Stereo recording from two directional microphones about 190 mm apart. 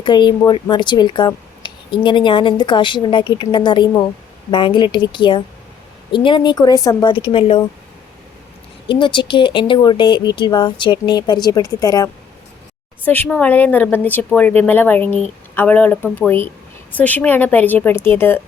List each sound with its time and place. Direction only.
0.0 s speech: 25° left (ahead or behind)
8.9 s speech: 25° left (ahead or behind)
13.1 s speech: 10° left (ahead or behind)